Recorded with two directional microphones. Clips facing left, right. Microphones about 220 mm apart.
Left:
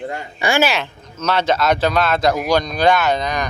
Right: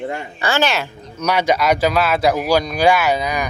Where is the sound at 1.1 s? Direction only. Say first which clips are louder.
Right 1 dB; 10° right (ahead or behind).